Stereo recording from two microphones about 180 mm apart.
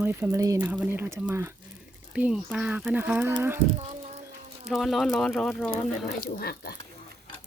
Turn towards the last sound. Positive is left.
turn(degrees=60)  # may be behind; listen again after turning